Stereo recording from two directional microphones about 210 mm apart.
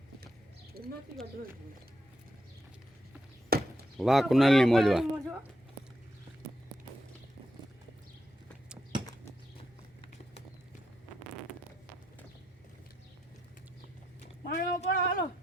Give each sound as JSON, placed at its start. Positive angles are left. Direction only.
{"t": 0.8, "sound": "bird", "side_deg": -45}
{"t": 3.5, "sound": "chop", "side_deg": -45}
{"t": 3.9, "sound": "speech", "side_deg": 0}
{"t": 14.4, "sound": "a sound", "side_deg": 50}